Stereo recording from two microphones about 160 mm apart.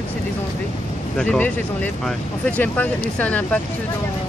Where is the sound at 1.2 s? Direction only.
10° left (ahead or behind).